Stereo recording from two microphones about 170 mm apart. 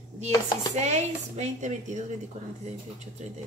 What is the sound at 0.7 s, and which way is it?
A woman's voice, 40° right (ahead or behind).